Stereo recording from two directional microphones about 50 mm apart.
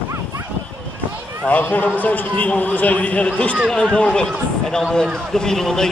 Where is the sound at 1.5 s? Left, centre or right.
Left.